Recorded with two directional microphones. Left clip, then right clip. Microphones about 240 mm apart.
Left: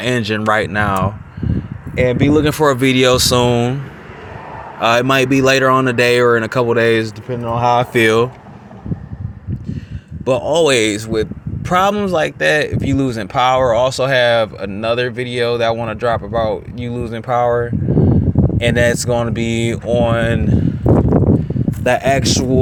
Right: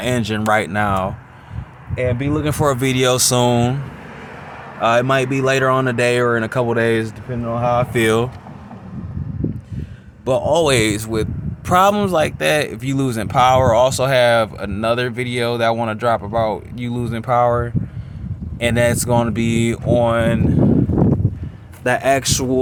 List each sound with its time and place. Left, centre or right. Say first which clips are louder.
0.0 s speech: left 3 dB; centre
2.0 s speech: left 7 dB; centre
4.8 s speech: left 2 dB; centre
7.3 s speech: left 5 dB; left
7.9 s speech: left 4 dB; centre
10.2 s speech: left 2 dB; centre
21.8 s speech: left 2 dB; centre